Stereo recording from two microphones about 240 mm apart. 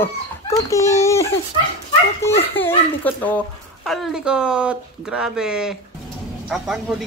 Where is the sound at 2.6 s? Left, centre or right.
Centre.